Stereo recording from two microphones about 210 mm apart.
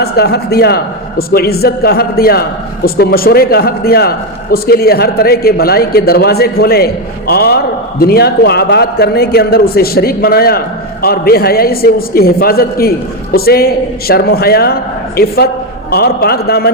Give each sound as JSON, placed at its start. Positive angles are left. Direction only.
{"t": 0.0, "sound": "a man's voice", "side_deg": 50}